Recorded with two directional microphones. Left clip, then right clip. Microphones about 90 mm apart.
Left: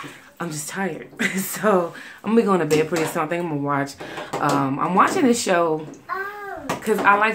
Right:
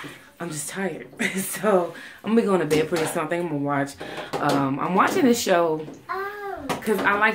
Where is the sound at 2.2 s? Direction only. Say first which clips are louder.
Left 2 dB; 20° left (ahead or behind).